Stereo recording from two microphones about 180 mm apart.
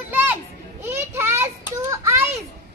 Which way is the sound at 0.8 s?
15° right (ahead or behind).